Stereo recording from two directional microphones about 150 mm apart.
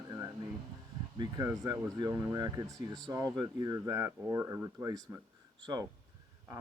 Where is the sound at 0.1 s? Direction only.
25° right (ahead or behind).